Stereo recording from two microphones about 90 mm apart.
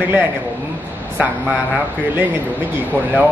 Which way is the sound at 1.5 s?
20° right (ahead or behind).